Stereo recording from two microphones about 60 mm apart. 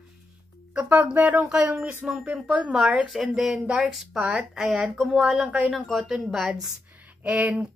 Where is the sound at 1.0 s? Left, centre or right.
Right.